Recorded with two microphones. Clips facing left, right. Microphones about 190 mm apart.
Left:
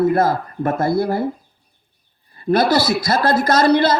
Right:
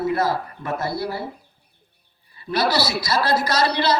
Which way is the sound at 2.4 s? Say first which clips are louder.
Left 6 dB; 50° left (ahead or behind).